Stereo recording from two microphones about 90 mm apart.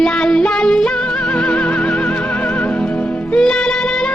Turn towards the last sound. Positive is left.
turn(degrees=5)  # may be behind; listen again after turning